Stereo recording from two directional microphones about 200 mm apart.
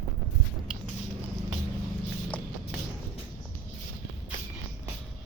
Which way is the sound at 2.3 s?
5° left (ahead or behind).